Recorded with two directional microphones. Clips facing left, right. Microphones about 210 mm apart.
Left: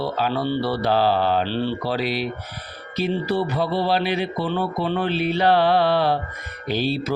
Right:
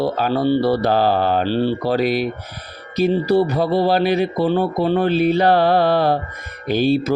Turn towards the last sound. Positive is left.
turn(degrees=-50)  # may be behind; listen again after turning